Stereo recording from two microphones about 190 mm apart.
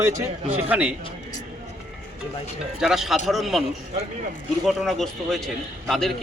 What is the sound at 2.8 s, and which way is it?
Speech, centre (ahead or behind).